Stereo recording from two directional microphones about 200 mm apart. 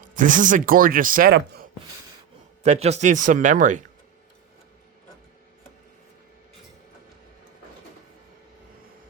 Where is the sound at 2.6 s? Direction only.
30° right (ahead or behind).